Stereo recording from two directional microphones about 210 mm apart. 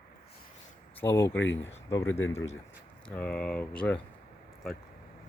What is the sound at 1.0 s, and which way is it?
Speech, 10° left (ahead or behind).